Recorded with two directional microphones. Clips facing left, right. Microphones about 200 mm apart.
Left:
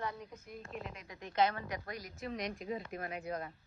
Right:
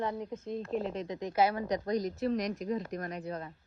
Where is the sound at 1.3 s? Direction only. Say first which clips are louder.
Right 3 dB; 10° right (ahead or behind).